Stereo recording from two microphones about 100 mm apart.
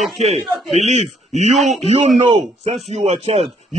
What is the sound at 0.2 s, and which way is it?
Speech, 90° right.